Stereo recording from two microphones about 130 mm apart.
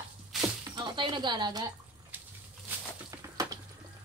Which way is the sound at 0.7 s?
35° right (ahead or behind).